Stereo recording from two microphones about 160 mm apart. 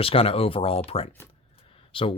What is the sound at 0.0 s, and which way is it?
A man's voice, 35° left (ahead or behind).